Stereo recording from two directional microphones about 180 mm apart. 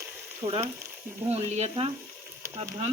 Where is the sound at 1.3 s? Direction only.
35° right (ahead or behind).